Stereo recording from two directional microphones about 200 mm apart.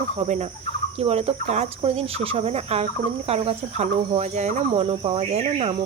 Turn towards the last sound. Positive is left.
turn(degrees=-30)  # may be behind; listen again after turning